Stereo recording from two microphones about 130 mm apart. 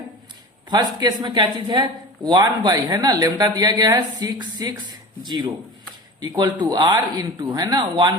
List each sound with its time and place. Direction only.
0.7 s speech: 30° right (ahead or behind)